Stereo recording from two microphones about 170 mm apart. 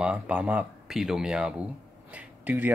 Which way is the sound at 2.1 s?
10° right (ahead or behind).